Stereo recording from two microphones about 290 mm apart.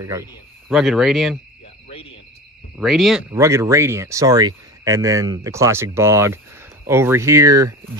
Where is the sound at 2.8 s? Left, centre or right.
Centre.